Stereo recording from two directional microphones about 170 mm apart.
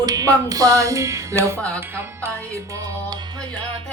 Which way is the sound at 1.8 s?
15° right (ahead or behind).